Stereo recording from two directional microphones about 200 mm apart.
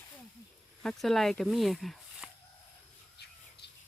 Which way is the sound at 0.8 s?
Centre (ahead or behind).